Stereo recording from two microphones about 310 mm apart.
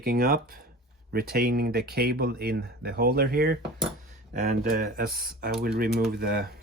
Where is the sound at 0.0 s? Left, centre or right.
Right.